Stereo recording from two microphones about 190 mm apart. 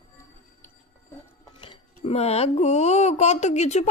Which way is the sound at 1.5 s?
25° left (ahead or behind).